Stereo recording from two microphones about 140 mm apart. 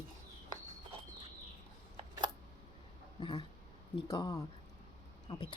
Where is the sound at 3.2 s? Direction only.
35° left (ahead or behind).